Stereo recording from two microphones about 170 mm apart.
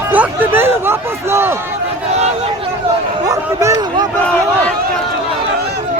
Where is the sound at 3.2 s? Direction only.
20° right (ahead or behind).